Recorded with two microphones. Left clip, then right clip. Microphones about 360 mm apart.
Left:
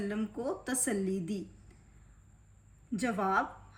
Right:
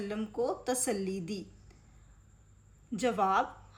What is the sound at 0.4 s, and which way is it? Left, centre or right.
A woman's voice, centre.